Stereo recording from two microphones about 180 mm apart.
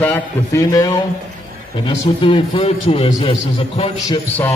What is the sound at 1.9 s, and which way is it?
A man's voice, 30° left (ahead or behind).